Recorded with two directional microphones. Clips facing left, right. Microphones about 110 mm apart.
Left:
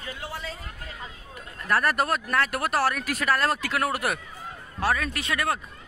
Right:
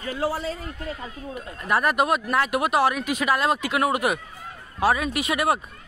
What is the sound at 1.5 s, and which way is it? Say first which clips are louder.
Speech: right 2 dB; 5° right (ahead or behind).